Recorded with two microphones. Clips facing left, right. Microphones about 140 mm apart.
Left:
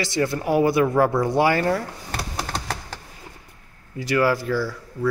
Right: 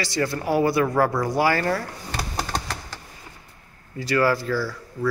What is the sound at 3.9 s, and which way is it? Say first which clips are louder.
Speech: left 1 dB; 15° left (ahead or behind).